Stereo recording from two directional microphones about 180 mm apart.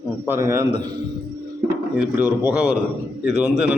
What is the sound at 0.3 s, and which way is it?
Speech, 15° right (ahead or behind).